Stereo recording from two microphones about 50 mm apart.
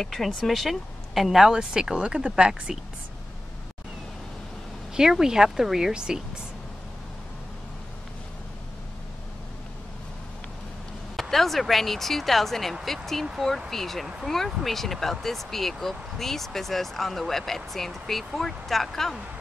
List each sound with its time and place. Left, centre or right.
0.0 s speech: centre
5.1 s speech: centre
11.1 s speech: centre